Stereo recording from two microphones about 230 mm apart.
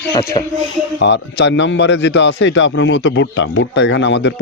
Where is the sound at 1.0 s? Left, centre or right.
Left.